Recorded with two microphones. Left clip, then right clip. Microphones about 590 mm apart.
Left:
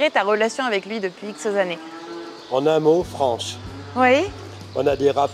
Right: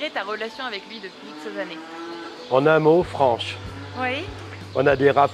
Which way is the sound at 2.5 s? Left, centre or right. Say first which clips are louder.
Right 1 dB; right.